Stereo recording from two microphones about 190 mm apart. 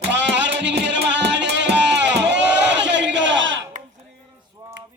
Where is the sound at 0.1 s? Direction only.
65° right (ahead or behind).